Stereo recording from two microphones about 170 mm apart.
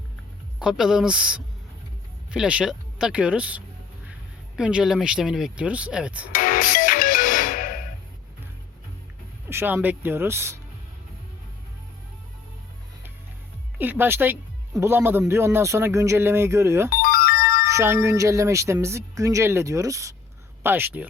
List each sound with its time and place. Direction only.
0.6 s speech: centre (ahead or behind)
6.3 s music: 55° left (ahead or behind)
9.5 s speech: 10° right (ahead or behind)
13.7 s speech: 10° right (ahead or behind)
16.9 s music: 55° left (ahead or behind)
17.7 s speech: 15° right (ahead or behind)